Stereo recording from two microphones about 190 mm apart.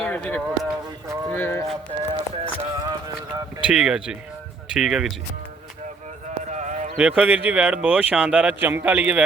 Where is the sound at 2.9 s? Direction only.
20° right (ahead or behind).